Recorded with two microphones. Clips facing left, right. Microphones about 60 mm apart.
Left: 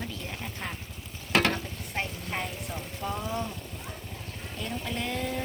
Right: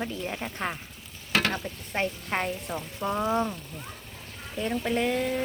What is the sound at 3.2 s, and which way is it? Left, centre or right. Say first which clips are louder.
Speech: right 10 dB; right.